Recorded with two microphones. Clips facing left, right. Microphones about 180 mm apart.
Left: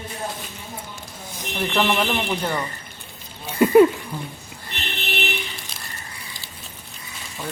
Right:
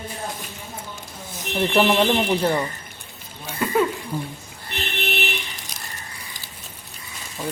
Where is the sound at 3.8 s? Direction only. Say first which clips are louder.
Left 8 dB; 15° left (ahead or behind).